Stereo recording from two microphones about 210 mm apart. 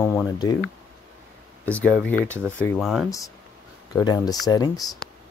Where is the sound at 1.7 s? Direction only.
5° left (ahead or behind).